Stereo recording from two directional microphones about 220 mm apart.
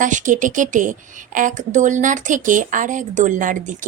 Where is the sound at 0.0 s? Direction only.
35° right (ahead or behind).